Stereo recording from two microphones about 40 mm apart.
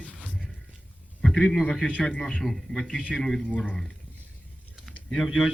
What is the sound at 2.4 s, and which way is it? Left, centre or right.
A man's voice, centre.